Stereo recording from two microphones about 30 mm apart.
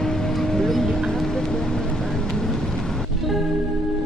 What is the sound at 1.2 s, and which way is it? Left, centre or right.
Music, centre.